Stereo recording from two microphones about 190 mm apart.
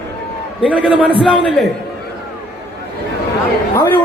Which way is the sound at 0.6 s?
5° right (ahead or behind).